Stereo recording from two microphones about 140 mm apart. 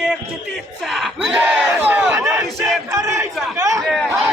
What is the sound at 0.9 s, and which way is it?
Battle cry, centre (ahead or behind).